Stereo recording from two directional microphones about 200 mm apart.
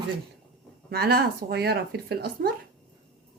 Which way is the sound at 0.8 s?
50° right (ahead or behind).